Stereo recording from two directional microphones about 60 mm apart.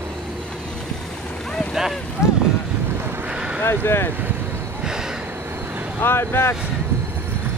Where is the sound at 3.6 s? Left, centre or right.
Left.